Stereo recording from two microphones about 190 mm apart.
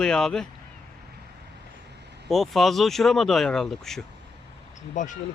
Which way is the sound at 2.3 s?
Centre (ahead or behind).